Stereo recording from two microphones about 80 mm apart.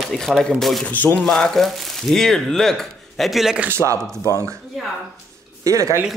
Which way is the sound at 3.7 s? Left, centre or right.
Right.